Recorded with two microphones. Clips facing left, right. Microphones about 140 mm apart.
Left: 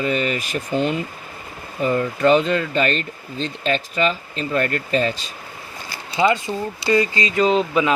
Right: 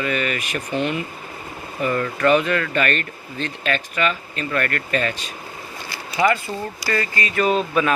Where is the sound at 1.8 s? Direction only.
20° left (ahead or behind).